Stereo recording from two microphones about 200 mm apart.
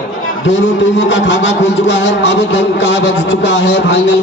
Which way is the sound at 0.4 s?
65° left (ahead or behind).